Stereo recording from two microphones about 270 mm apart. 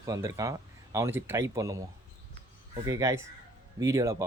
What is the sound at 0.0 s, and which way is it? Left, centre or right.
Speech, centre.